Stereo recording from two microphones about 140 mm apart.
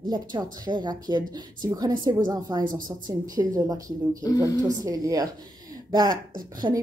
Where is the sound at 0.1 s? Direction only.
30° right (ahead or behind).